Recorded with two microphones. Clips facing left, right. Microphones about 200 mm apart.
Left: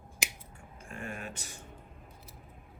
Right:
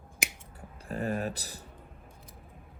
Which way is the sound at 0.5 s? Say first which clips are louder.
Right 9 dB; 35° right (ahead or behind).